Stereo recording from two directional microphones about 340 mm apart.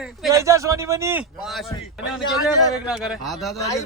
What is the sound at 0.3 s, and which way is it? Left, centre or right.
Speech, centre.